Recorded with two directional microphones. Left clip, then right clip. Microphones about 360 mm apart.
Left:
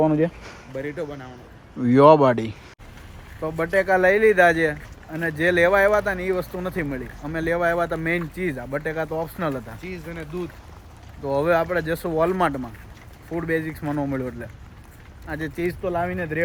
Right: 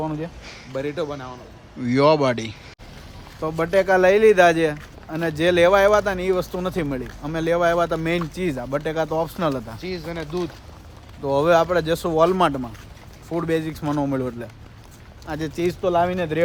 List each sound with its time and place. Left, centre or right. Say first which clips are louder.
0.8 s speech: right 4 dB; centre
9.8 s speech: right 5 dB; centre
11.2 s speech: right 3 dB; centre